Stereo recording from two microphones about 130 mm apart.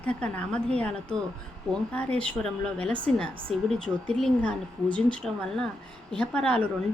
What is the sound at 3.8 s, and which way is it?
A woman's voice, 10° left (ahead or behind).